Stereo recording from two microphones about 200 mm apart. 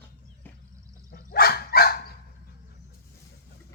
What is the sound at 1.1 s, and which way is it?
Dog, 50° left (ahead or behind).